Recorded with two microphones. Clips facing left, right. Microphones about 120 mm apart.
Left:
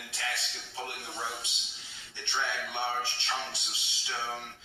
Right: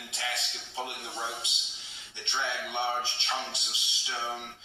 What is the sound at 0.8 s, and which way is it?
Speech, 20° right (ahead or behind).